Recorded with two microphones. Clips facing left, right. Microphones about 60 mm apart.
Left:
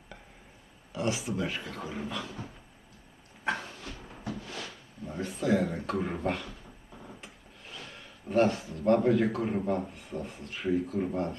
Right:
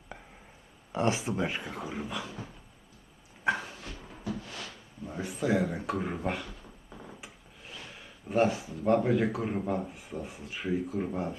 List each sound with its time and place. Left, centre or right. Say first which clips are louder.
0.9 s speech: right 2 dB; right; by 2.2 s centre
3.4 s a sound: right 3 dB; centre
5.0 s a man's voice: left 1 dB; centre
8.3 s a man's voice: left 1 dB; centre